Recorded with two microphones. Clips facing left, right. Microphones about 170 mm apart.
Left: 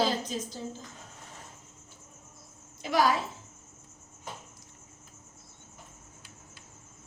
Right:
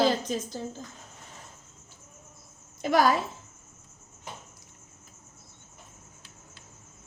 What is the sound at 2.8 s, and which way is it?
Speech, 50° right (ahead or behind).